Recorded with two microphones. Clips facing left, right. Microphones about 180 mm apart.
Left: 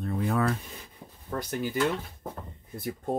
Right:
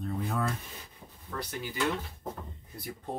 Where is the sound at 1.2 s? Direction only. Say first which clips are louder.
Left 6 dB; 45° left (ahead or behind).